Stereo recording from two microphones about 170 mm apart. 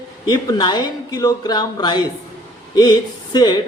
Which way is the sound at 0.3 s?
25° left (ahead or behind).